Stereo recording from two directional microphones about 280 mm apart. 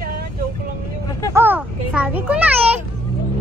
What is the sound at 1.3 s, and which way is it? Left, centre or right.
Speech, centre.